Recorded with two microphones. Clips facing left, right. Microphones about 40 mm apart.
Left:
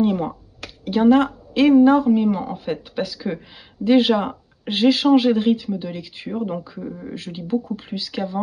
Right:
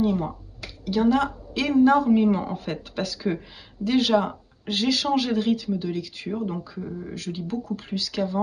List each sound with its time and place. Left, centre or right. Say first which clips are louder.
0.0 s a sound: left 4 dB; left
0.8 s speech: left 6 dB; left
2.2 s speech: left 2 dB; centre
3.8 s speech: left 5 dB; left
6.8 s speech: left 2 dB; centre
7.2 s speech: left 7 dB; left